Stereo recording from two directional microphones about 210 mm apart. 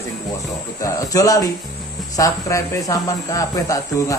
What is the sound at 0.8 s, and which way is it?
Speech, 15° left (ahead or behind).